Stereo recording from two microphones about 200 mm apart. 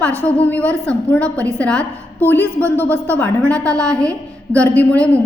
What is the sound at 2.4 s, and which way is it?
Speech, 10° right (ahead or behind).